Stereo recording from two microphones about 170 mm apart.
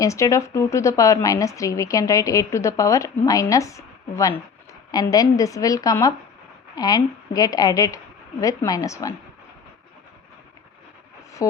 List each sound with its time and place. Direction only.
0.0 s speech: 20° left (ahead or behind)